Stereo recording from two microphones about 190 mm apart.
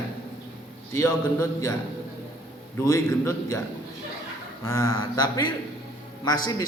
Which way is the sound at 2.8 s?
15° left (ahead or behind).